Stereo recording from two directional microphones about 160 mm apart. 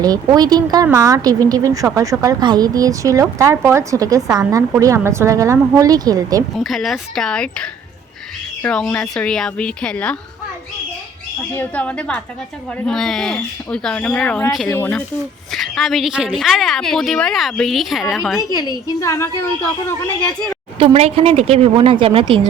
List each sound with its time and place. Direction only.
0.0 s a woman's voice: 25° right (ahead or behind)
6.6 s a woman's voice: centre (ahead or behind)
11.5 s a woman's voice: 10° left (ahead or behind)
15.5 s a woman's voice: centre (ahead or behind)
18.3 s a woman's voice: 20° left (ahead or behind)
20.7 s speech: 35° right (ahead or behind)